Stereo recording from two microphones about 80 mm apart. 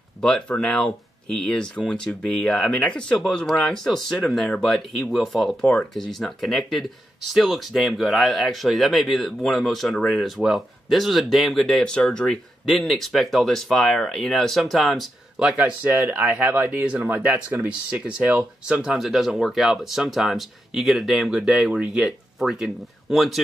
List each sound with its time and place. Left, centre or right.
0.2 s speech: centre
15.6 s speech: right; by 23.4 s centre